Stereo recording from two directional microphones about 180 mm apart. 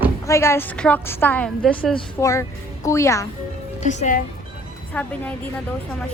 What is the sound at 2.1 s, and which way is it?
A woman's voice, 15° left (ahead or behind).